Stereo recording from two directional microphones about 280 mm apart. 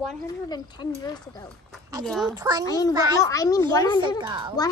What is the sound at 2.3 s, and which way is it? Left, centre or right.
Speech, centre.